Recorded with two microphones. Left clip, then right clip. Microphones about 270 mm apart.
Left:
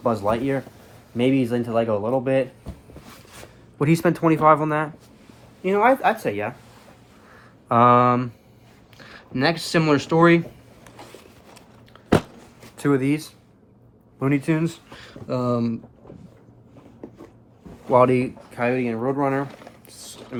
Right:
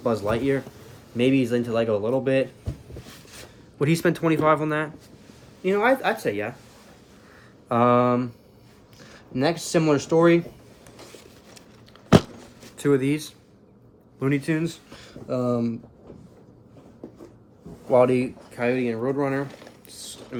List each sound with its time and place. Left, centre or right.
0.0 s speech: centre
3.8 s speech: centre
7.7 s speech: left
10.8 s zipper: left
12.8 s speech: centre
17.9 s speech: left